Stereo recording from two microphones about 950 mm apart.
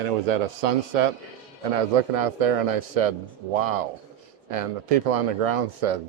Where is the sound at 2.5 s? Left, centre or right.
Right.